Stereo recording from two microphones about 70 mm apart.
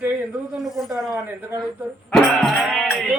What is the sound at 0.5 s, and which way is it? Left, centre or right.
Speech, centre.